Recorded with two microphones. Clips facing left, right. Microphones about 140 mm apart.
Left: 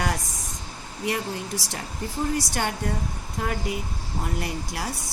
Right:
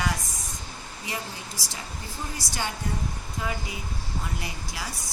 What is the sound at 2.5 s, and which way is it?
Speech, 55° left (ahead or behind).